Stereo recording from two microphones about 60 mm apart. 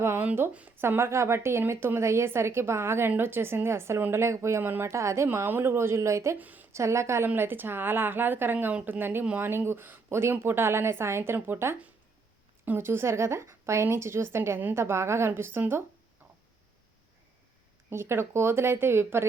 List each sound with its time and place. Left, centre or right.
0.8 s a woman's voice: right
6.4 s a sound: right
6.7 s a woman's voice: right
7.3 s a woman's voice: right
17.9 s a woman's voice: right